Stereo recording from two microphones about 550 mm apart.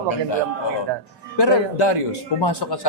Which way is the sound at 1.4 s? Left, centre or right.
Left.